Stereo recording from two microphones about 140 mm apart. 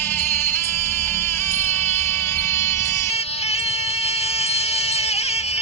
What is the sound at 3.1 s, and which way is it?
Music, 50° left (ahead or behind).